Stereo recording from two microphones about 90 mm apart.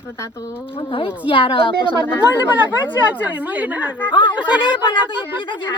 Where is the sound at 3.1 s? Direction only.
15° right (ahead or behind).